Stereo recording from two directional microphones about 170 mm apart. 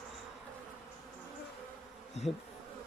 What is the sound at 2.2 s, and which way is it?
Speech, 40° left (ahead or behind).